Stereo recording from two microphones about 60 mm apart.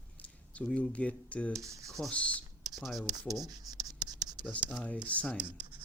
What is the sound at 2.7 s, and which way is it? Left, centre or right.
Speech, centre.